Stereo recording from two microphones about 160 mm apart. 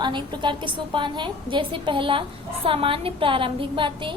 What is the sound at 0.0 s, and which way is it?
A woman's voice, 30° right (ahead or behind).